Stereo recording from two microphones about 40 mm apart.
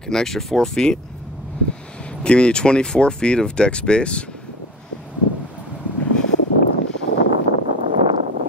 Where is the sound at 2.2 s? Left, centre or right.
Left.